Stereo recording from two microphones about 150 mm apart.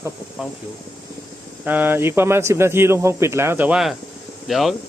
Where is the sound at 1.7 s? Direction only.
10° right (ahead or behind).